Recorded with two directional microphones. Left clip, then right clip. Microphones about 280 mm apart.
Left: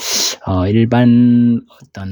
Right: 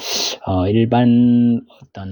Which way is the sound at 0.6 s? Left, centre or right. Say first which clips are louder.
Left 2 dB; left.